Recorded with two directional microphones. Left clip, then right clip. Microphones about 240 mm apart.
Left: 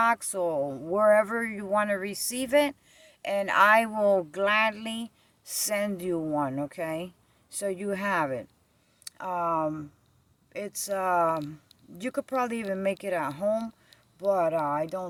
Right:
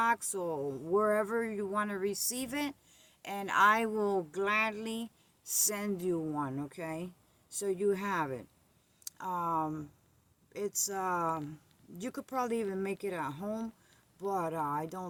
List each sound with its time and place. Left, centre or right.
0.0 s speech: centre